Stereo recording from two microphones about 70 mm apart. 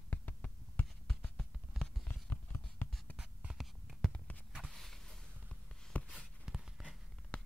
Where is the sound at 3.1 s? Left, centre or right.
Centre.